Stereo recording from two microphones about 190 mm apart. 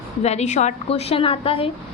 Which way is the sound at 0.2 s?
35° left (ahead or behind).